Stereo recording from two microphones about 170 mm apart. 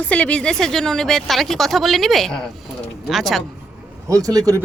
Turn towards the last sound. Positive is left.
turn(degrees=-20)  # may be behind; listen again after turning